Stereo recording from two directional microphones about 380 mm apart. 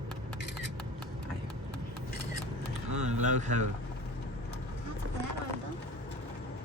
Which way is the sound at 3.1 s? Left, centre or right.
Centre.